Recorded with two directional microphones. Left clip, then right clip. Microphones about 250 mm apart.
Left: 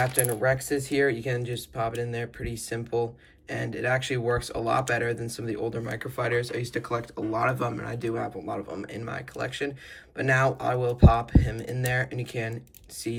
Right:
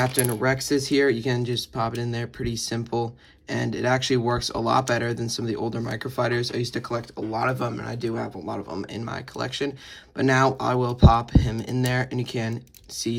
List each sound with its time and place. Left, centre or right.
0.0 s speech: centre